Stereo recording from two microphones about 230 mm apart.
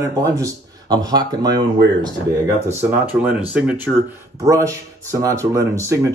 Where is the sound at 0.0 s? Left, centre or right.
Centre.